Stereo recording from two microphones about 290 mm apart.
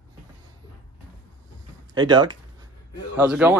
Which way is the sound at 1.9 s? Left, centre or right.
Centre.